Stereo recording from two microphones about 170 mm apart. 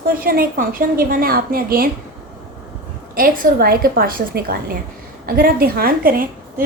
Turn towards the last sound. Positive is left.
turn(degrees=-60)  # may be behind; listen again after turning